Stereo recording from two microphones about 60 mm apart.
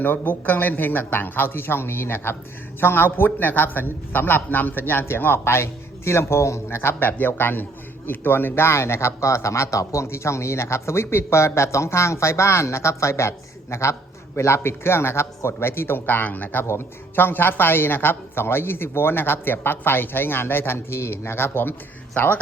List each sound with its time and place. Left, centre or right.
0.0 s a woman's voice: left
16.6 s a woman's voice: left